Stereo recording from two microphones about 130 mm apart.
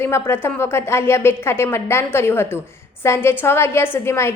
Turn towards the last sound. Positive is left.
turn(degrees=20)  # may be behind; listen again after turning